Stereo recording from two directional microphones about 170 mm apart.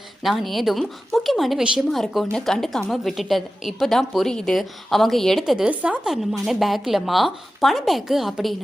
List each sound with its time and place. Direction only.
0.2 s a woman's voice: centre (ahead or behind)